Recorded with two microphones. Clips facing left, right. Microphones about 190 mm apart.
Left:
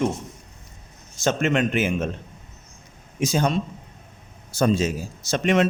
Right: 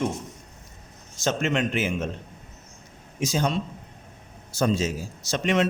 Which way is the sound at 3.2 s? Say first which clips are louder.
Left 3 dB; 55° left (ahead or behind).